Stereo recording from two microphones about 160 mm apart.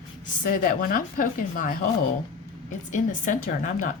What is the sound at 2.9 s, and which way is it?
Speech, 55° left (ahead or behind).